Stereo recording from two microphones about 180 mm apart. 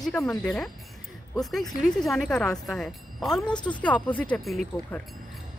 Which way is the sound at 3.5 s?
25° left (ahead or behind).